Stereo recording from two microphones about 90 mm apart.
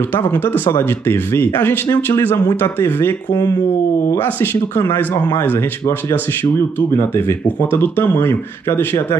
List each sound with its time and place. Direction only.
0.1 s speech: 25° left (ahead or behind)